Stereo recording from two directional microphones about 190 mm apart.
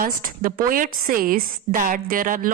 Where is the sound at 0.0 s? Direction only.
50° right (ahead or behind).